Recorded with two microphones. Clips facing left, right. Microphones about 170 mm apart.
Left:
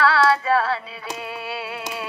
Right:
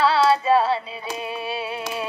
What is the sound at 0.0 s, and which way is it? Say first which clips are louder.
Music: right 1 dB; 20° right (ahead or behind).